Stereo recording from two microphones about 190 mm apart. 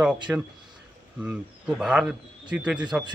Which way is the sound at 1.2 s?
5° right (ahead or behind).